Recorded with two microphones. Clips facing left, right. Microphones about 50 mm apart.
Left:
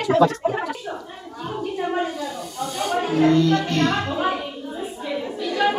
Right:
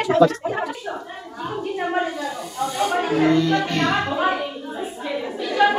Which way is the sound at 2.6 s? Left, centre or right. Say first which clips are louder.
Right 2 dB; centre.